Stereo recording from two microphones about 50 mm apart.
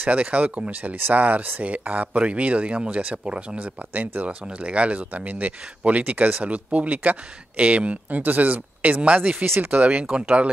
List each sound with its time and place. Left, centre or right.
0.0 s speech: right